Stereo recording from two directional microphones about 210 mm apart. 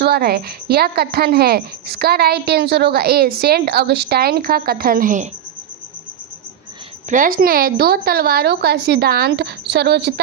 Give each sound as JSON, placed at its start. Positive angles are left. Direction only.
{"t": 0.0, "sound": "a woman's voice", "side_deg": -50}
{"t": 7.1, "sound": "a woman's voice", "side_deg": -40}